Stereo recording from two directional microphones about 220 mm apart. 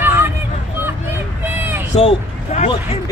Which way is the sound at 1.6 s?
10° right (ahead or behind).